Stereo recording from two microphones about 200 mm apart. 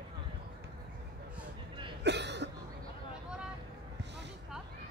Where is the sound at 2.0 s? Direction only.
60° right (ahead or behind).